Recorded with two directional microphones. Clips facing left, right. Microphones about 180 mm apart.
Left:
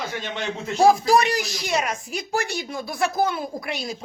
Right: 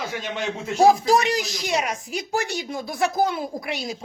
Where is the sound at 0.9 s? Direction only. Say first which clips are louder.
Left 1 dB; 20° right (ahead or behind).